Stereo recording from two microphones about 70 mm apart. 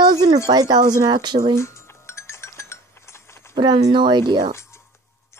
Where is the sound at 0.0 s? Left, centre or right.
Right.